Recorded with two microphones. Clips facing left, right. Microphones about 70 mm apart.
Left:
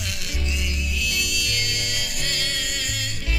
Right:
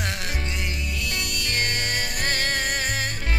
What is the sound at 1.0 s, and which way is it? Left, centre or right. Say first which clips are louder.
Music: left 3 dB; right.